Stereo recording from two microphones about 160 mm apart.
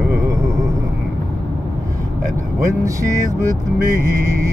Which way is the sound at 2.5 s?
20° right (ahead or behind).